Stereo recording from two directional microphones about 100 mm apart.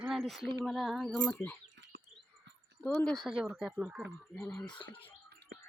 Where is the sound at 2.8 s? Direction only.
15° left (ahead or behind).